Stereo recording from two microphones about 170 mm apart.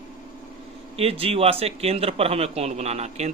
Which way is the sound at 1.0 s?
35° right (ahead or behind).